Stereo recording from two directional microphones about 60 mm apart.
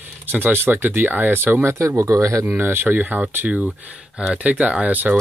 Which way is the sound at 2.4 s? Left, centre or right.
Right.